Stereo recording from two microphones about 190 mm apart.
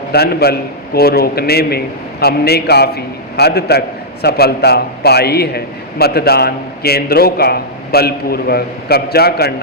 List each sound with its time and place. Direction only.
0.1 s a man's voice: 55° left (ahead or behind)